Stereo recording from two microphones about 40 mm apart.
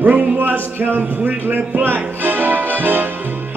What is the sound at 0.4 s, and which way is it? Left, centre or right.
Speech, right.